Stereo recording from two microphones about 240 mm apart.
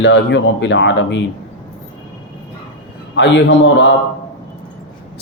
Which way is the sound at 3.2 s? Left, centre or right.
Left.